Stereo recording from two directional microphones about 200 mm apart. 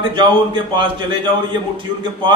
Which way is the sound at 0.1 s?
25° right (ahead or behind).